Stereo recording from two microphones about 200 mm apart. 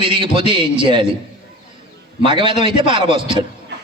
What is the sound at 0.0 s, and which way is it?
A man's voice, 25° right (ahead or behind).